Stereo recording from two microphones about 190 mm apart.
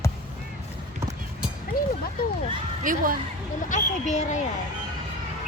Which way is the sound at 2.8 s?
45° right (ahead or behind).